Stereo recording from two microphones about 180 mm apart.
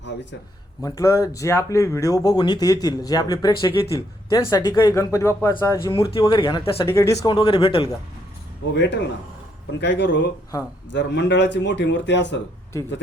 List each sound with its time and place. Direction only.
0.0 s speech: 80° left
0.8 s speech: 20° left (ahead or behind)
6.8 s speech: 15° left (ahead or behind)
8.8 s speech: 75° left (ahead or behind)